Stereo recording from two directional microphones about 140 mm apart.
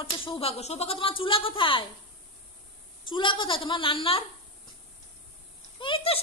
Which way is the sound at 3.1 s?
35° left (ahead or behind).